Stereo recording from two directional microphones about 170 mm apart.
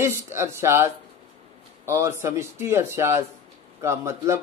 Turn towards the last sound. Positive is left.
turn(degrees=-15)  # may be behind; listen again after turning